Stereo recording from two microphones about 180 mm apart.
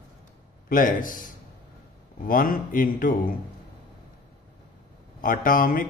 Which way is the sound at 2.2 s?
50° left (ahead or behind).